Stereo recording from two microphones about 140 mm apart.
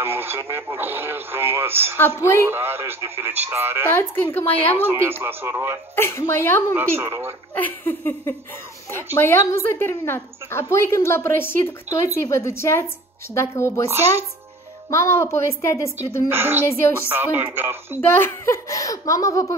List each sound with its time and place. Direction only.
0.0 s speech: 15° right (ahead or behind)
3.9 s speech: 15° left (ahead or behind)
4.8 s speech: 15° right (ahead or behind)
5.9 s speech: 20° left (ahead or behind)
6.7 s speech: 15° right (ahead or behind)
7.5 s a woman's voice: 15° left (ahead or behind)
13.8 s speech: 15° right (ahead or behind)
14.9 s a woman's voice: 20° left (ahead or behind)
16.3 s speech: 15° right (ahead or behind)
16.6 s speech: 20° left (ahead or behind)
17.1 s speech: 15° right (ahead or behind)
18.0 s a woman's voice: 15° left (ahead or behind)